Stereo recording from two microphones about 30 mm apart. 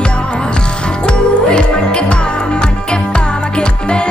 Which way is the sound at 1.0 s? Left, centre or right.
Left.